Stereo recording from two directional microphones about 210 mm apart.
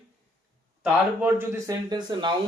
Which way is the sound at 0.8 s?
10° right (ahead or behind).